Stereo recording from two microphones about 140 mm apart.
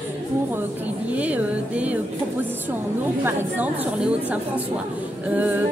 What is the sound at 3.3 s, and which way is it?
A woman's voice, 10° right (ahead or behind).